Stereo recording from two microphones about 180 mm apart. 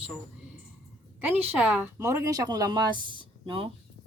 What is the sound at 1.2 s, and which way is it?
Speech, 10° right (ahead or behind).